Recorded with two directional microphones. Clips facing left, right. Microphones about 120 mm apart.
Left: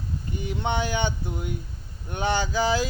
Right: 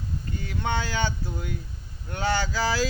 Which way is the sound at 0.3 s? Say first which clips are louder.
Left 2 dB; 20° left (ahead or behind).